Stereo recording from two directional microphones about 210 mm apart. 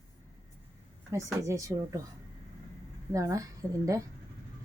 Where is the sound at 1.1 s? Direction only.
15° right (ahead or behind).